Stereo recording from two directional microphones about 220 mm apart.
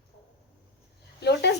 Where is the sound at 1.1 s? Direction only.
50° left (ahead or behind).